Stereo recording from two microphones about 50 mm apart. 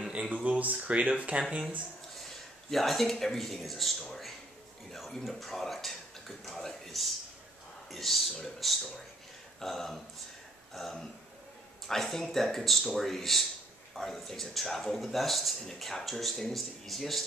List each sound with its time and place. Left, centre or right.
0.1 s speech: right
2.7 s speech: centre